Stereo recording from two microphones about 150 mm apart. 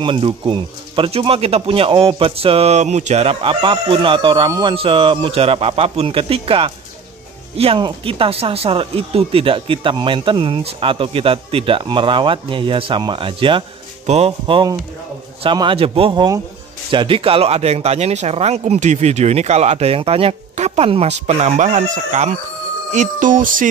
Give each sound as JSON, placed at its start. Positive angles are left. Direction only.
{"t": 0.0, "sound": "speech", "side_deg": -35}
{"t": 14.0, "sound": "speech", "side_deg": -45}
{"t": 14.4, "sound": "speech", "side_deg": -30}
{"t": 22.8, "sound": "music", "side_deg": -55}